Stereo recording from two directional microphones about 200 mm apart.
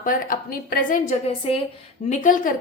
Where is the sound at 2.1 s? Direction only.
40° left (ahead or behind).